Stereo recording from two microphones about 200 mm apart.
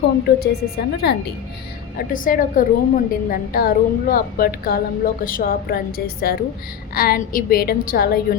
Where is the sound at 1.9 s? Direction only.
45° left (ahead or behind).